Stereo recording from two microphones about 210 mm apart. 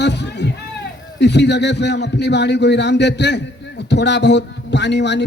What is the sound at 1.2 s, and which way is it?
Speech, 55° left (ahead or behind).